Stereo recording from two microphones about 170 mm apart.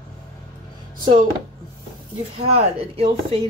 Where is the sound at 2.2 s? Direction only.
35° right (ahead or behind).